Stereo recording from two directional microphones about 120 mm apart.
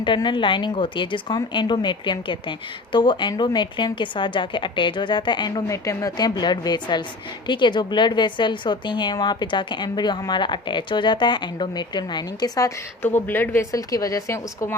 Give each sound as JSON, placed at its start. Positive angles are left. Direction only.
{"t": 0.0, "sound": "speech", "side_deg": 40}
{"t": 5.6, "sound": "speech", "side_deg": 25}
{"t": 13.1, "sound": "speech", "side_deg": 15}
{"t": 13.7, "sound": "a woman's voice", "side_deg": 30}